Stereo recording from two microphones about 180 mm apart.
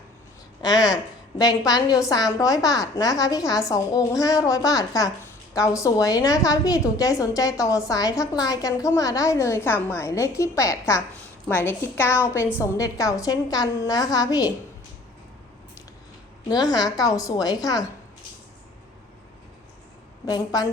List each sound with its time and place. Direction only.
0.6 s a woman's voice: 20° left (ahead or behind)
16.5 s a woman's voice: 20° left (ahead or behind)
20.2 s a woman's voice: 20° left (ahead or behind)